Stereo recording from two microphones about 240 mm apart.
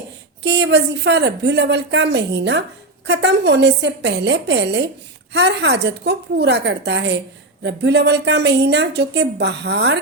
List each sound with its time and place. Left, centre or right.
0.4 s a woman's voice: right